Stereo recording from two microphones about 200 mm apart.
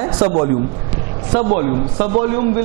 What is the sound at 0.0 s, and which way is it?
A man's voice, 25° right (ahead or behind).